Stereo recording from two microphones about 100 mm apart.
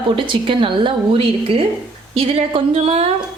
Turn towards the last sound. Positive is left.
turn(degrees=-80)